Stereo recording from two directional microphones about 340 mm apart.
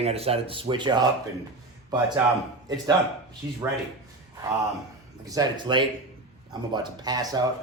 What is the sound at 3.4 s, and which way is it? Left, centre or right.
Speech, centre.